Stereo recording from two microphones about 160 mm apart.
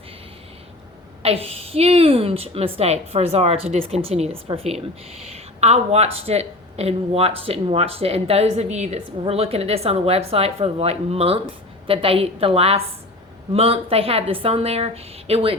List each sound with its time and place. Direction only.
1.2 s a woman's voice: 40° right (ahead or behind)